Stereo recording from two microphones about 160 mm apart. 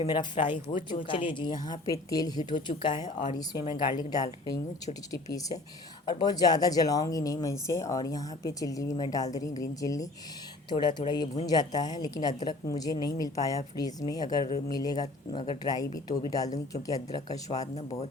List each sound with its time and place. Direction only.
0.0 s speech: 30° left (ahead or behind)
15.0 s speech: 35° left (ahead or behind)